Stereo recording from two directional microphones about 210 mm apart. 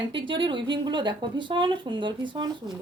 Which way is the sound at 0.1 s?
25° right (ahead or behind).